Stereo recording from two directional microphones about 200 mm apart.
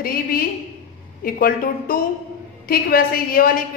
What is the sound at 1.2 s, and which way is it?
A woman's voice, 45° left (ahead or behind).